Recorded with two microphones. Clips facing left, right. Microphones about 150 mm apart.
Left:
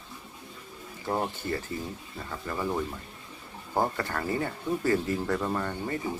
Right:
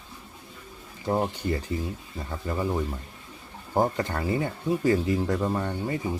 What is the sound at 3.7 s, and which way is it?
Speech, 20° right (ahead or behind).